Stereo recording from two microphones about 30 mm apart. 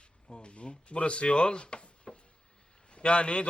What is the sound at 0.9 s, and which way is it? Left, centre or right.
Speech, left.